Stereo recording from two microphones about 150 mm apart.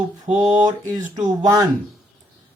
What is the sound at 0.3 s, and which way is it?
Speech, 45° right (ahead or behind).